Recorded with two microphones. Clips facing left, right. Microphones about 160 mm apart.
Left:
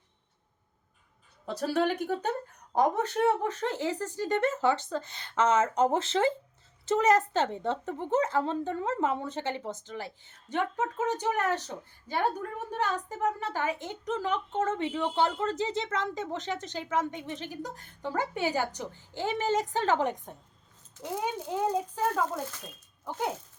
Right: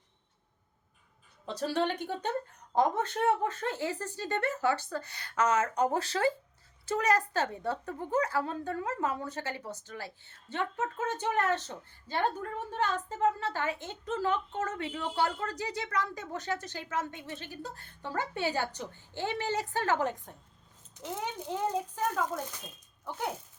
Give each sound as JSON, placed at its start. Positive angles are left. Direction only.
{"t": 1.5, "sound": "a woman's voice", "side_deg": 10}